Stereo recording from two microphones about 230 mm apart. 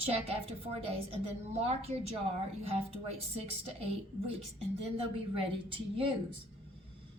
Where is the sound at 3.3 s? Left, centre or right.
Right.